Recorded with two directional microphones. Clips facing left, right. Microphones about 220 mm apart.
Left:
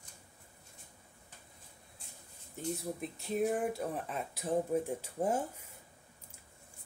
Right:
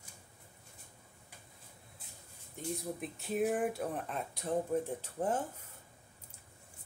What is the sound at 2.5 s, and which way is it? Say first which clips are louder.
Speech: left 1 dB; centre (ahead or behind).